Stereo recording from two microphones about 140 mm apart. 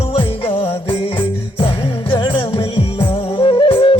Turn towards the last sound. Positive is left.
turn(degrees=35)  # may be behind; listen again after turning